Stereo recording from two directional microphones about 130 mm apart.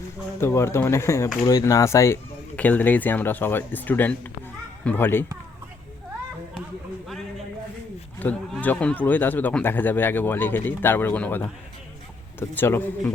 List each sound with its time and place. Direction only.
0.3 s speech: 20° left (ahead or behind)
2.6 s a child's voice: 10° left (ahead or behind)
8.2 s speech: 15° left (ahead or behind)